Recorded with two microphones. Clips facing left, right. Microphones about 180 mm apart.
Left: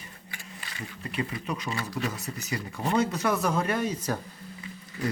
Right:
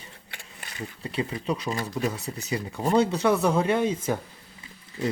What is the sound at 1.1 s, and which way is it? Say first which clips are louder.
Speech: right 4 dB; 30° right (ahead or behind).